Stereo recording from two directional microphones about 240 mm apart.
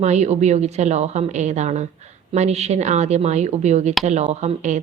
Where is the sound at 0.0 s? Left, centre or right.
Right.